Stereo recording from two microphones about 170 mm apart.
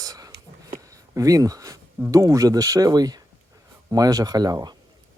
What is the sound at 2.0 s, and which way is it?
Speech, 20° right (ahead or behind).